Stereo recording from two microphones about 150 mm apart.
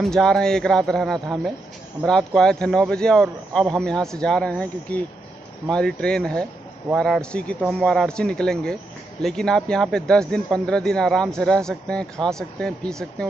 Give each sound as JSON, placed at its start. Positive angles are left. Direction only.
{"t": 0.0, "sound": "speech", "side_deg": 5}